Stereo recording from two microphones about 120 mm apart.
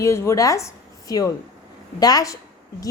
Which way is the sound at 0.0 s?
25° left (ahead or behind).